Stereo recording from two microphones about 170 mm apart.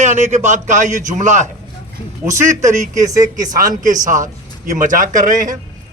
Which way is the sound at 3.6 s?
50° right (ahead or behind).